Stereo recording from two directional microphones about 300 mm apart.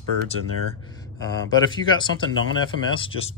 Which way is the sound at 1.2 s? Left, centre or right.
Centre.